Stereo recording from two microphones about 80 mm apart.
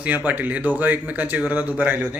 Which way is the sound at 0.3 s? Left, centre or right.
Centre.